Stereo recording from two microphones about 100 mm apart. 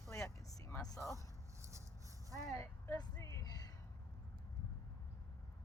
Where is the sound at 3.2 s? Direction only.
35° left (ahead or behind).